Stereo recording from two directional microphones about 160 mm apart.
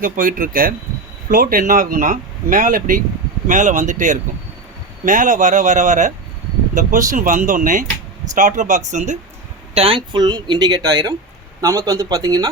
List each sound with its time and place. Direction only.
0.0 s speech: 60° right (ahead or behind)
9.7 s speech: 35° right (ahead or behind)